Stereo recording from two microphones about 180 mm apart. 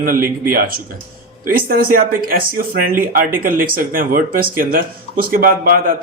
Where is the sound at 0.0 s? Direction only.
50° right (ahead or behind).